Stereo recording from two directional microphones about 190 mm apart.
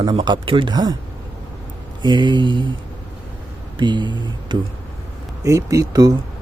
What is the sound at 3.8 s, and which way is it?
A man's voice, 25° right (ahead or behind).